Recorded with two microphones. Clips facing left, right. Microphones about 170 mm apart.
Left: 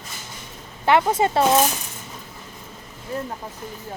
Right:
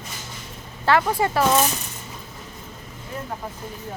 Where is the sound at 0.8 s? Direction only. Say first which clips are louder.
Left 2 dB; 20° left (ahead or behind).